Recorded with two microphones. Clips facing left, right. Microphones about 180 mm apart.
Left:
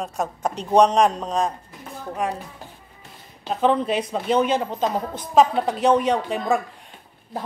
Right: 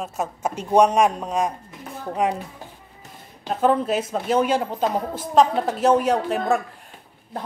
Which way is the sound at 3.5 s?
5° right (ahead or behind).